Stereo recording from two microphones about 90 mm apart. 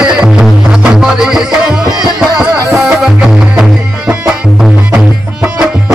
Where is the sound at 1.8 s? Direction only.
45° right (ahead or behind).